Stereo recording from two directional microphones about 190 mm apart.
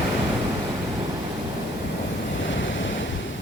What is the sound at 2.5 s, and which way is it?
Waves, 75° left (ahead or behind).